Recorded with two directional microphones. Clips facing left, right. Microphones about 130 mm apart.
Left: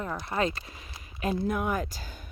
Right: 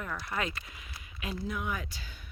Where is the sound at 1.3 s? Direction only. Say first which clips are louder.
Left 7 dB; 50° left (ahead or behind).